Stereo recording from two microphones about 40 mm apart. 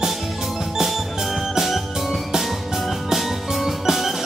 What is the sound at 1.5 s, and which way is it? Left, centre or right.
Music, centre.